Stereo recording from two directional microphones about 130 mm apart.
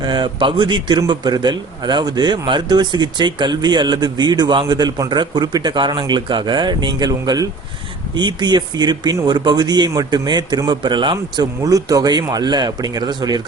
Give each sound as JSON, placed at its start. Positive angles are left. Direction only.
{"t": 0.0, "sound": "a man's voice", "side_deg": -35}